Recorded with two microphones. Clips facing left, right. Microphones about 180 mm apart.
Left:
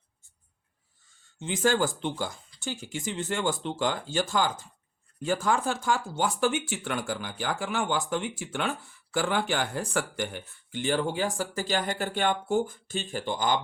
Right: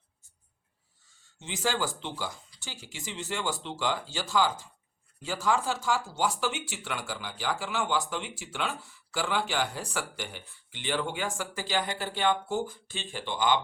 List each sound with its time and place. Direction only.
1.4 s speech: 50° left (ahead or behind)